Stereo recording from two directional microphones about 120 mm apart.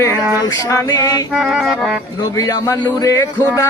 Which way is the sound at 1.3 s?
Centre (ahead or behind).